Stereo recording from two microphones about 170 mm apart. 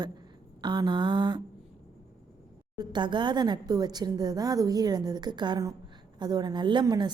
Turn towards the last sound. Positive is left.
turn(degrees=-25)  # may be behind; listen again after turning